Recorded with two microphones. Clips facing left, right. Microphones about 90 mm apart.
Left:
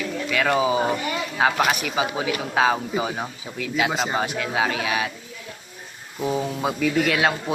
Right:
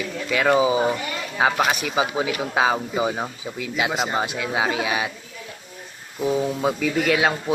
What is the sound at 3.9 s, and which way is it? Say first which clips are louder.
Speech: even; centre (ahead or behind).